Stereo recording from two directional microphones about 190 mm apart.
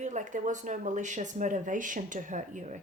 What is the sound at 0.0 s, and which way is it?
Speech, 40° right (ahead or behind).